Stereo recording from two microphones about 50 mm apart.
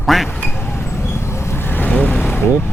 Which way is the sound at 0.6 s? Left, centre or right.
Left.